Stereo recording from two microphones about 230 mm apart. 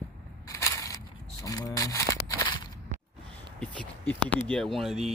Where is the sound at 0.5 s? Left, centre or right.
Centre.